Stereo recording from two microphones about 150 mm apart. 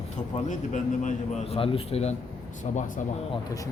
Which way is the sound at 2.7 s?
65° left (ahead or behind).